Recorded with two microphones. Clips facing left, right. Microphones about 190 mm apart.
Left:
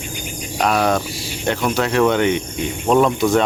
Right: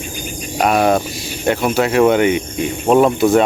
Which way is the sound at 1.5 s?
5° right (ahead or behind).